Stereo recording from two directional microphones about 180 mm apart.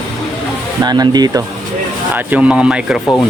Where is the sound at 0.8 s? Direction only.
25° right (ahead or behind).